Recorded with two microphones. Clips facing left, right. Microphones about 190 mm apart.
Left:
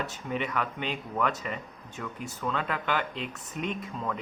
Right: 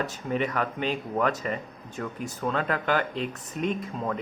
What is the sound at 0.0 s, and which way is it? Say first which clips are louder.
Speech: right 4 dB; 40° right (ahead or behind).